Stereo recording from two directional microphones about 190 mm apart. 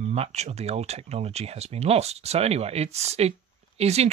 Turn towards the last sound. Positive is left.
turn(degrees=-35)  # may be behind; listen again after turning